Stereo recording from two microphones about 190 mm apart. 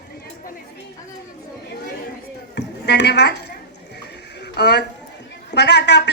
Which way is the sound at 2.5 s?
65° left (ahead or behind).